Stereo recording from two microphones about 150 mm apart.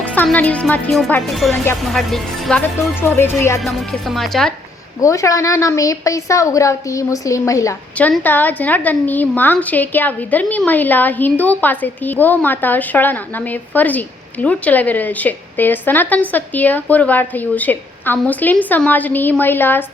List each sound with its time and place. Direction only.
0.0 s a woman's voice: 10° left (ahead or behind)
3.6 s speech: centre (ahead or behind)
4.9 s a woman's voice: 20° left (ahead or behind)
7.9 s a woman's voice: 10° left (ahead or behind)